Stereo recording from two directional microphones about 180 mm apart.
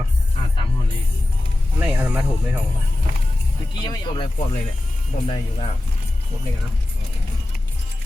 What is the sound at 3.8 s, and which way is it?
Speech, 25° left (ahead or behind).